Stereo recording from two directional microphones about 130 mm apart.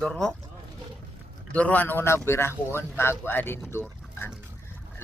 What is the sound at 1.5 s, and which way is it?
Speech, 10° left (ahead or behind).